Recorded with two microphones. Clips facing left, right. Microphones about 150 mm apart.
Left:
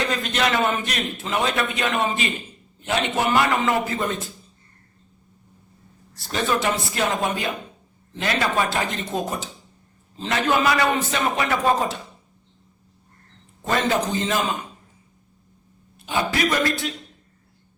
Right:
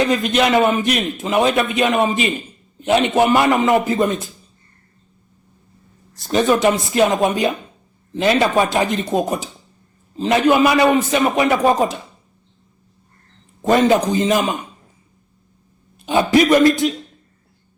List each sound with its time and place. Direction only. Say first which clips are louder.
0.1 s a man's voice: right 7 dB; 15° right (ahead or behind)
6.1 s a man's voice: right 8 dB; 15° right (ahead or behind)
13.7 s a man's voice: right 8 dB; 15° right (ahead or behind)
16.0 s a man's voice: right 9 dB; 20° right (ahead or behind)